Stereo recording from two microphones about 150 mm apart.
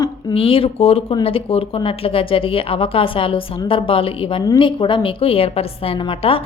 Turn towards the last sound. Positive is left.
turn(degrees=40)  # may be behind; listen again after turning